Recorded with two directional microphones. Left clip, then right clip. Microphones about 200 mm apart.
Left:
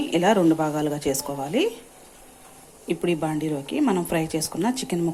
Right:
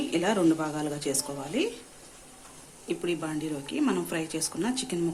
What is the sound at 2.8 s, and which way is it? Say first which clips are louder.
A woman's voice: left 6 dB; 25° left (ahead or behind).